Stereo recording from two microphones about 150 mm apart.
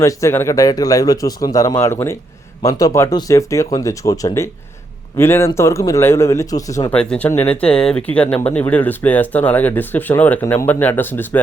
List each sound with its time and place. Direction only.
0.0 s speech: 20° left (ahead or behind)
6.9 s speech: 5° left (ahead or behind)